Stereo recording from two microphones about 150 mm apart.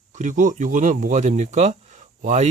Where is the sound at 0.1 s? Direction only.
55° right (ahead or behind).